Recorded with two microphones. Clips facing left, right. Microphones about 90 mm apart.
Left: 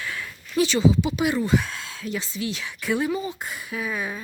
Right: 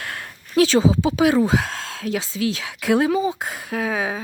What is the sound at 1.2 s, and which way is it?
A woman's voice, 90° right.